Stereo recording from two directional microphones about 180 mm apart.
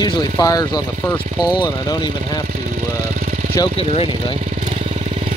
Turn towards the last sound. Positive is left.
turn(degrees=35)  # may be behind; listen again after turning